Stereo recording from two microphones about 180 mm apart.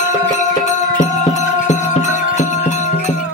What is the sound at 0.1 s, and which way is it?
Music, 45° left (ahead or behind).